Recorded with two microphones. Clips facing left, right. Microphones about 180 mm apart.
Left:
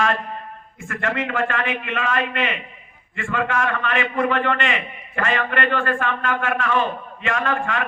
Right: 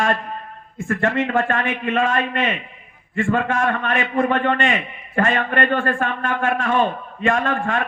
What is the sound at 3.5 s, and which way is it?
A man's voice, 45° right (ahead or behind).